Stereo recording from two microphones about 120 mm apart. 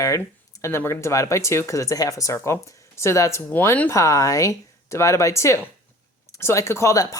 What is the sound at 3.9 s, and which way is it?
Speech, 25° left (ahead or behind).